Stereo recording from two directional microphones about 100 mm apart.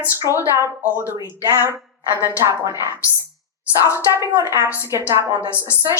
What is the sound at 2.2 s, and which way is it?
Speech, 30° right (ahead or behind).